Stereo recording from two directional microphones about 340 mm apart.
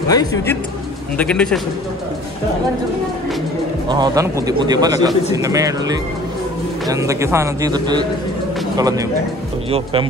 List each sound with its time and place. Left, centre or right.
0.1 s a man's voice: centre
3.9 s a man's voice: centre